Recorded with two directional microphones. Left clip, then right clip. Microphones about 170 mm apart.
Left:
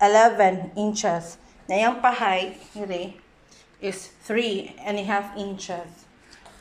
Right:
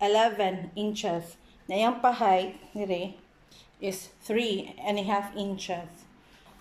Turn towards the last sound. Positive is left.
turn(degrees=-20)  # may be behind; listen again after turning